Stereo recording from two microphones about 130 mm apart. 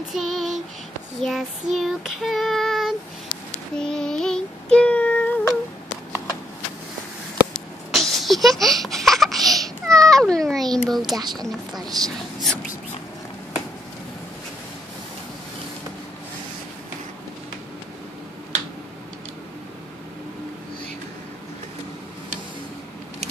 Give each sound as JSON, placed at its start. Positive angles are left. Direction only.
{"t": 0.1, "sound": "child singing", "side_deg": 0}
{"t": 7.9, "sound": "a sound", "side_deg": 0}
{"t": 10.9, "sound": "a woman's voice", "side_deg": 0}
{"t": 12.0, "sound": "speech", "side_deg": -30}